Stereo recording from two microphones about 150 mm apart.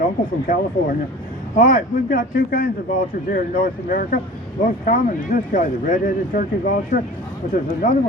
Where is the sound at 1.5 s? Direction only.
65° left (ahead or behind).